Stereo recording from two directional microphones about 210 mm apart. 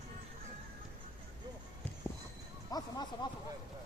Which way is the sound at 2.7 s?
20° left (ahead or behind).